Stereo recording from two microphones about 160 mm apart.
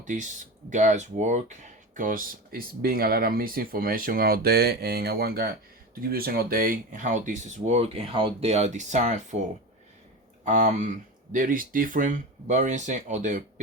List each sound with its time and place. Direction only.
0.0 s speech: 50° right (ahead or behind)
10.4 s speech: 50° right (ahead or behind)
11.3 s speech: 60° right (ahead or behind)